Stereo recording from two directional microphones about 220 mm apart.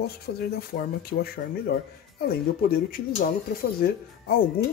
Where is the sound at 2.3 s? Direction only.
45° left (ahead or behind).